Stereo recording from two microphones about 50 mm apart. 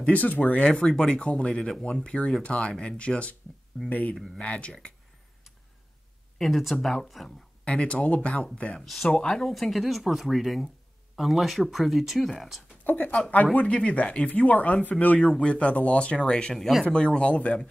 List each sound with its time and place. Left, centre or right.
0.0 s speech: left
0.7 s speech: centre
3.8 s speech: centre
4.4 s speech: left
6.3 s speech: centre
7.6 s speech: left
9.3 s speech: centre
12.8 s speech: left
13.5 s speech: left
14.3 s speech: left
15.1 s speech: centre
16.5 s speech: centre
16.8 s speech: centre